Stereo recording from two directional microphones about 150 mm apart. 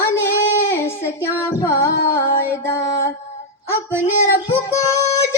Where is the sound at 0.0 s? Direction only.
15° left (ahead or behind).